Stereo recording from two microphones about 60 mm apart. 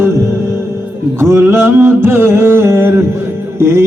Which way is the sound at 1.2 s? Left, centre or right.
Right.